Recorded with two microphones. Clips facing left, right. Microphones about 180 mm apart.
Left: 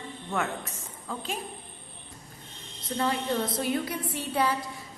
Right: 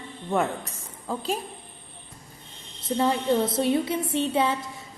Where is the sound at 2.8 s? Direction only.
25° right (ahead or behind).